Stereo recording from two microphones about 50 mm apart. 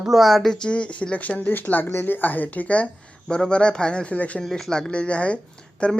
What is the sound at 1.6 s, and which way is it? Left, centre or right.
Speech, left.